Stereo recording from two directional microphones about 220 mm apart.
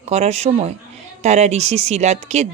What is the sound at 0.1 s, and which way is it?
Speech, 30° right (ahead or behind).